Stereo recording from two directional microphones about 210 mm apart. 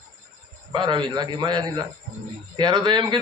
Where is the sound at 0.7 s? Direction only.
20° right (ahead or behind).